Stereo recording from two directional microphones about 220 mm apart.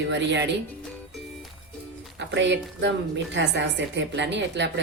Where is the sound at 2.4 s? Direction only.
55° right (ahead or behind).